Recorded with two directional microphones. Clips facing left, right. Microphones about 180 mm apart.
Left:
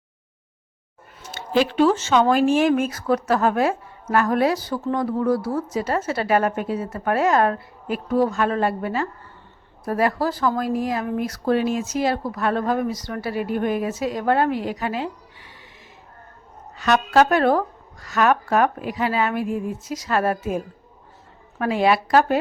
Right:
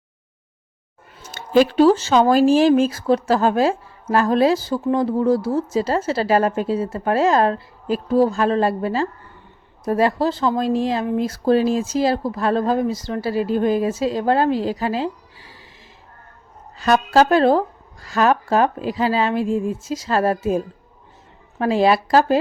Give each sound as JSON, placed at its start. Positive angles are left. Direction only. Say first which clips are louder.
{"t": 1.3, "sound": "speech", "louder": "right 5 dB", "side_deg": -45}
{"t": 16.7, "sound": "a woman's voice", "louder": "right 2 dB", "side_deg": -30}
{"t": 21.6, "sound": "a woman's voice", "louder": "right 3 dB", "side_deg": -30}